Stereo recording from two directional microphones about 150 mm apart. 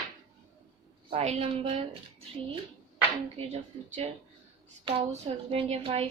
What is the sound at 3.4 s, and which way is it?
Speech, 40° right (ahead or behind).